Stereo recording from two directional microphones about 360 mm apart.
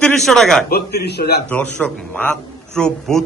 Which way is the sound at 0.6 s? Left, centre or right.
Left.